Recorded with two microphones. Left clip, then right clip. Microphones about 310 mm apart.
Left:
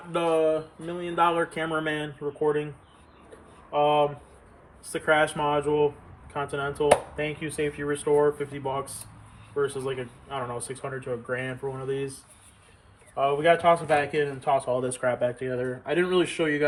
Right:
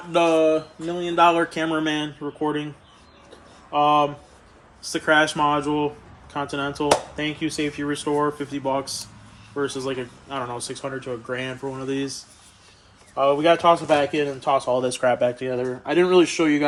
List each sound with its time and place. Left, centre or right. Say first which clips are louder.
0.1 s a man's voice: right 6 dB; right
3.7 s a man's voice: right 4 dB; right
13.1 s a man's voice: right 4 dB; centre